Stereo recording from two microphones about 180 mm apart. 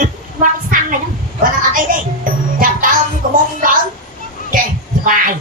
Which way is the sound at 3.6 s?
50° right (ahead or behind).